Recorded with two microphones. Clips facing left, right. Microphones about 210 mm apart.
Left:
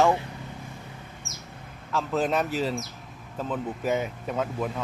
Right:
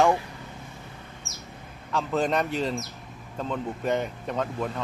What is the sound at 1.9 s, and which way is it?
Speech, centre (ahead or behind).